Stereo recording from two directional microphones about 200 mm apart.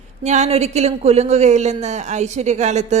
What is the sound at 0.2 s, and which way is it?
A woman's voice, 35° right (ahead or behind).